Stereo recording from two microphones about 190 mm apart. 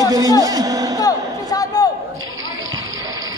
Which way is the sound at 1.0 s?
20° left (ahead or behind).